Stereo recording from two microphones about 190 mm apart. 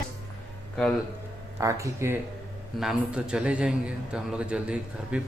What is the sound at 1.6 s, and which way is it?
Speech, 15° right (ahead or behind).